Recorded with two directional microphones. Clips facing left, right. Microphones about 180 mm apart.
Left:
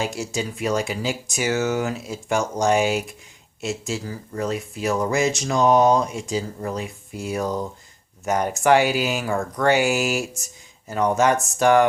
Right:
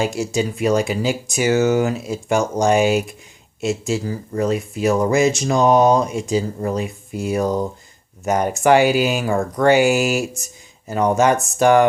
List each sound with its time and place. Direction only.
0.0 s speech: 15° right (ahead or behind)
7.4 s speech: 35° right (ahead or behind)
8.2 s speech: 20° right (ahead or behind)
9.2 s speech: 25° right (ahead or behind)
9.6 s speech: 15° right (ahead or behind)